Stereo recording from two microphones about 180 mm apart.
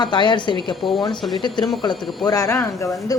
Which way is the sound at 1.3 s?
25° left (ahead or behind).